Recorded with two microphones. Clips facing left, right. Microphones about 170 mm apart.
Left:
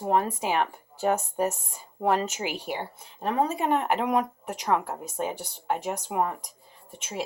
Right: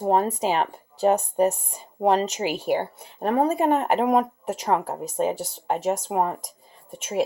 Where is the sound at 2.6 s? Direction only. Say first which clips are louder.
Right 9 dB; 50° right (ahead or behind).